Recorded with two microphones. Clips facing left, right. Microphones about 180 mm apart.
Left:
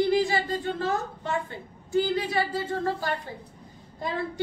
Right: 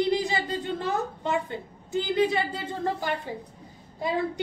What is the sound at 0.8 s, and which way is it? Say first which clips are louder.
Speech: even; 20° right (ahead or behind).